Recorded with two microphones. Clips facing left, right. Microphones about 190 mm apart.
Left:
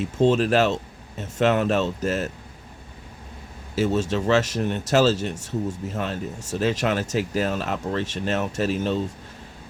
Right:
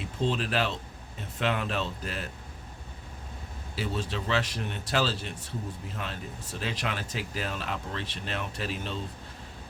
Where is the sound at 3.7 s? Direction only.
45° left (ahead or behind).